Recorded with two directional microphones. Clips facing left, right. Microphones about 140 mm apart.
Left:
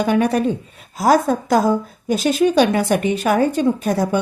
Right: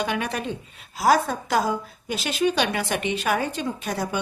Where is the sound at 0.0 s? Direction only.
45° left (ahead or behind).